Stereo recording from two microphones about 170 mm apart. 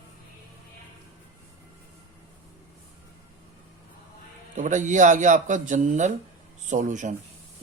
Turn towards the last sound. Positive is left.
turn(degrees=-45)  # may be behind; listen again after turning